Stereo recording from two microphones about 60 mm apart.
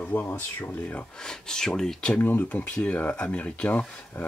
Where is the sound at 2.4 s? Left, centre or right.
Left.